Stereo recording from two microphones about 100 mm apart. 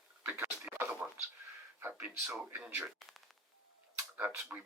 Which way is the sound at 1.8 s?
20° right (ahead or behind).